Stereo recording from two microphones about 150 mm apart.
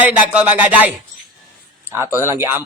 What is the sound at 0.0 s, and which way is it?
Speech, 10° right (ahead or behind).